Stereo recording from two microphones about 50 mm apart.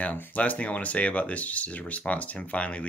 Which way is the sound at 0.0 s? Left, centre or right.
Left.